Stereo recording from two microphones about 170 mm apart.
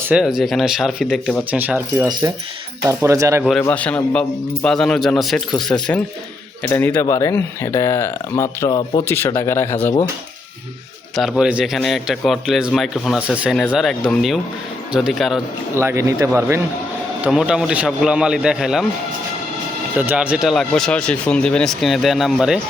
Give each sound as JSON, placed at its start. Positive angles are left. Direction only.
{"t": 0.1, "sound": "speech", "side_deg": -5}
{"t": 1.5, "sound": "speech", "side_deg": -10}
{"t": 3.6, "sound": "speech", "side_deg": 10}
{"t": 11.2, "sound": "speech", "side_deg": -5}
{"t": 15.7, "sound": "speech", "side_deg": -15}
{"t": 17.2, "sound": "speech", "side_deg": -5}
{"t": 20.0, "sound": "speech", "side_deg": -10}